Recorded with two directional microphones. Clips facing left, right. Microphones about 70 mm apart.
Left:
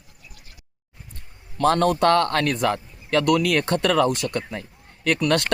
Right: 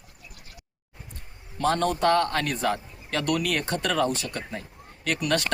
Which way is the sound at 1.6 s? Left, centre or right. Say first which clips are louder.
Left 5 dB; left.